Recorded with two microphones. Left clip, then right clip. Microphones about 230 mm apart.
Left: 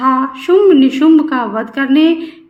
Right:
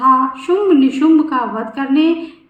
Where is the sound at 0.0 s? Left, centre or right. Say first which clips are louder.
Right 1 dB; left.